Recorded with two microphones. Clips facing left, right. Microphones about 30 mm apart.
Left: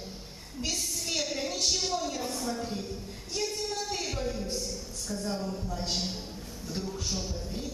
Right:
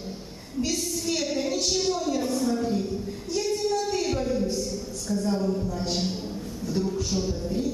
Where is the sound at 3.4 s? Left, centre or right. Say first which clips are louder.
Right 7 dB; centre.